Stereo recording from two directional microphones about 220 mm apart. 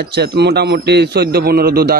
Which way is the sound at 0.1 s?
50° right (ahead or behind).